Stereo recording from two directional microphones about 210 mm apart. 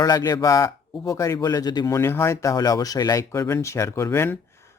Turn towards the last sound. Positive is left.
turn(degrees=15)  # may be behind; listen again after turning